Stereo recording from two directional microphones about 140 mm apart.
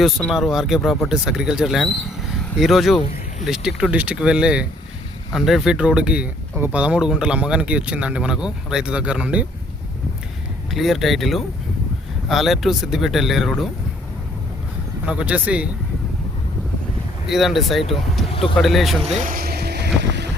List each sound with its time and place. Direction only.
0.3 s speech: centre (ahead or behind)
10.7 s speech: centre (ahead or behind)
15.0 s speech: 10° right (ahead or behind)
17.2 s speech: centre (ahead or behind)
18.3 s speech: 40° left (ahead or behind)
18.5 s speech: centre (ahead or behind)
19.2 s speech: 85° right